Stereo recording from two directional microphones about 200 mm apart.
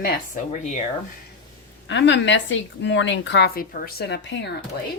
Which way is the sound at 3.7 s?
50° left (ahead or behind).